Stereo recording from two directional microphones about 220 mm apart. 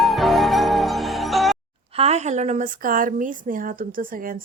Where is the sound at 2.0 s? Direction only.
30° right (ahead or behind).